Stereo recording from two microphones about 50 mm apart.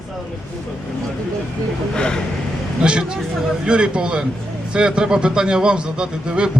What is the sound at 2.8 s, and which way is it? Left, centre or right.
A man's voice, centre.